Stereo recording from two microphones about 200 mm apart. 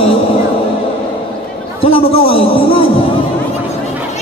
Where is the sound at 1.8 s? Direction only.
30° left (ahead or behind).